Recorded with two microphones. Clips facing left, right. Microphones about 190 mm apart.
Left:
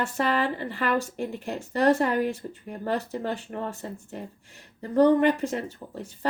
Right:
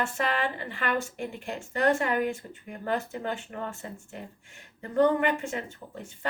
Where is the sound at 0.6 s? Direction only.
40° left (ahead or behind).